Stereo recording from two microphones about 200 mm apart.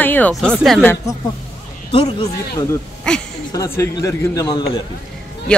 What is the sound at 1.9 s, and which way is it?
Speech, 25° left (ahead or behind).